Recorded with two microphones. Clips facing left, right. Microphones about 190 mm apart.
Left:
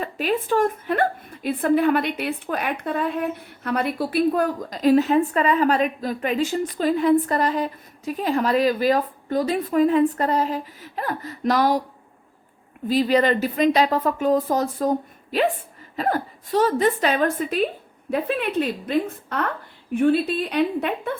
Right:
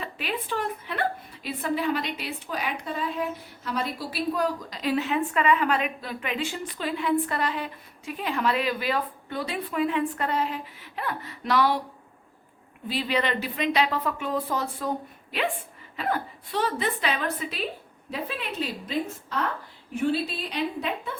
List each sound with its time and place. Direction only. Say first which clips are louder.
0.0 s a woman's voice: left 9 dB; 45° left (ahead or behind)
12.9 s a woman's voice: left 8 dB; 40° left (ahead or behind); by 21.1 s 55° left (ahead or behind)